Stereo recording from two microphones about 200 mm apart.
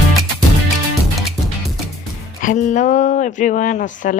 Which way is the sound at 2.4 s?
40° left (ahead or behind).